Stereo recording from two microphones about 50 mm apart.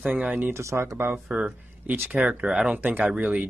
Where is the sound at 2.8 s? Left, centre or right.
Right.